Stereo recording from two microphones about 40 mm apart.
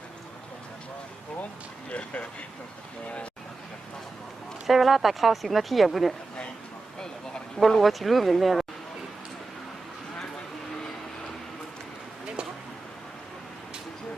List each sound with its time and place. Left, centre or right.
1.9 s speech: left
4.6 s speech: centre
7.0 s a sound: centre
7.8 s speech: centre